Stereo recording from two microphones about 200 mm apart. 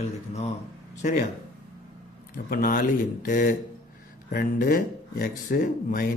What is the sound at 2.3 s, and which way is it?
Speech, 45° left (ahead or behind).